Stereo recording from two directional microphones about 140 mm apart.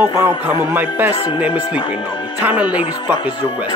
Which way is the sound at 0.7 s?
15° right (ahead or behind).